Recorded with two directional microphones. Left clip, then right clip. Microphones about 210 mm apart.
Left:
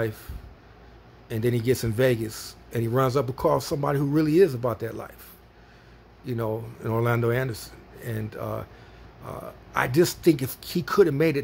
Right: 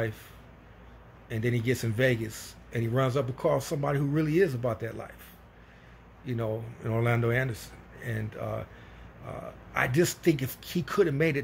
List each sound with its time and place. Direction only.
1.3 s speech: 25° left (ahead or behind)
6.2 s speech: 20° left (ahead or behind)
9.7 s speech: 20° left (ahead or behind)